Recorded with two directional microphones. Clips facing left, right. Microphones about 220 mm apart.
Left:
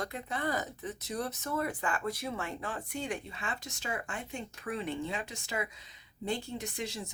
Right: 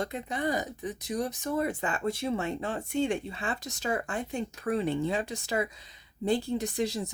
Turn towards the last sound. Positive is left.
turn(degrees=-35)  # may be behind; listen again after turning